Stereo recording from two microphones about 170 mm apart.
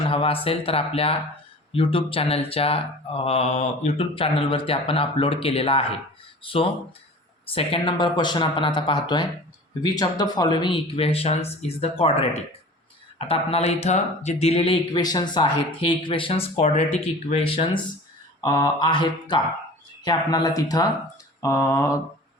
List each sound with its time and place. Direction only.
0.1 s speech: 35° left (ahead or behind)
18.4 s speech: 25° left (ahead or behind)
21.4 s mantra: 15° left (ahead or behind)